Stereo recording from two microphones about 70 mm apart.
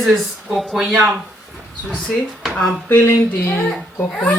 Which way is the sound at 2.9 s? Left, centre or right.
Left.